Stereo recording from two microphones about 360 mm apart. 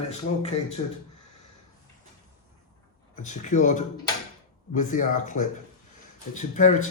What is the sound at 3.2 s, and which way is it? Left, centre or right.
Speech, centre.